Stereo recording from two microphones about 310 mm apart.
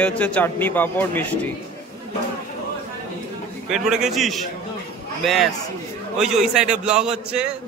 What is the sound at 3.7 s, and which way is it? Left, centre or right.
A man's voice, centre.